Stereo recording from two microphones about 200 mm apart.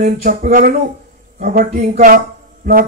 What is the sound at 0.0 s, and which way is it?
Speech, 45° right (ahead or behind).